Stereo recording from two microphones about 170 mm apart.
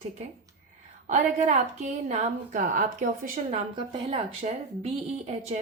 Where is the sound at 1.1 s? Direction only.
45° right (ahead or behind).